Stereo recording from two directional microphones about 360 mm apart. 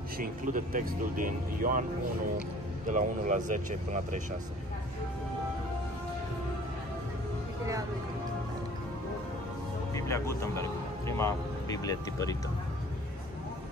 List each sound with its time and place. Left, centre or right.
0.2 s speech: right
2.9 s speech: right
9.9 s speech: centre